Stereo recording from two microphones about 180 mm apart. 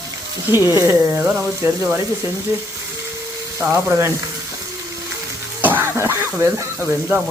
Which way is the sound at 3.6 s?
10° right (ahead or behind).